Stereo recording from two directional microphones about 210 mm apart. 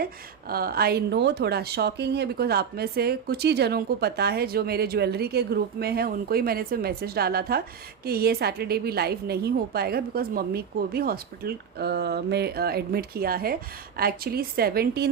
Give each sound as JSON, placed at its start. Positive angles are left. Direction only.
{"t": 0.0, "sound": "a woman's voice", "side_deg": -45}